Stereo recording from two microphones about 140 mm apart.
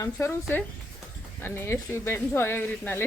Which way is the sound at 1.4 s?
15° left (ahead or behind).